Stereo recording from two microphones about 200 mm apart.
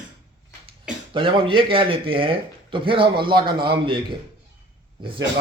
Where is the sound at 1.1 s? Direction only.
25° right (ahead or behind).